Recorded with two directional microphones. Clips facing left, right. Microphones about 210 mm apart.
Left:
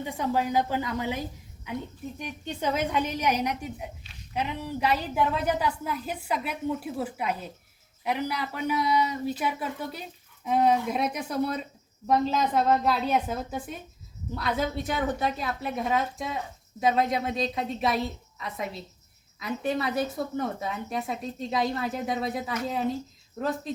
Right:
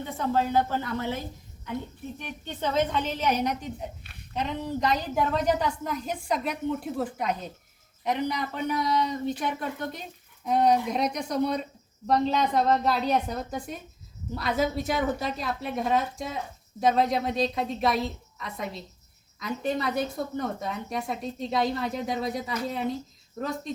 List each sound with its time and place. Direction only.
0.0 s a woman's voice: 15° left (ahead or behind)
4.0 s a sound: 55° right (ahead or behind)
4.4 s a woman's voice: 10° left (ahead or behind)